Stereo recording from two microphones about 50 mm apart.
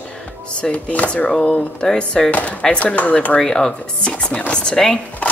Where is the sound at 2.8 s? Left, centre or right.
Left.